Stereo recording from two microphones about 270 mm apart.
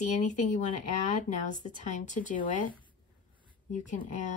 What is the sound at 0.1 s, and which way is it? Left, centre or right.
Speech, left.